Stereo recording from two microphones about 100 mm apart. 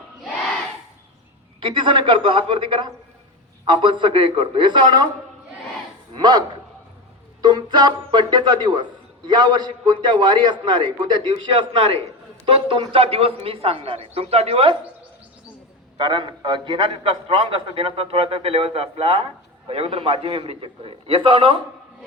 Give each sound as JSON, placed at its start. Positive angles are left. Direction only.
{"t": 1.6, "sound": "a man's voice", "side_deg": -55}
{"t": 6.1, "sound": "a man's voice", "side_deg": -45}
{"t": 7.4, "sound": "a man's voice", "side_deg": -45}
{"t": 12.5, "sound": "a man's voice", "side_deg": -65}
{"t": 16.0, "sound": "a man's voice", "side_deg": -50}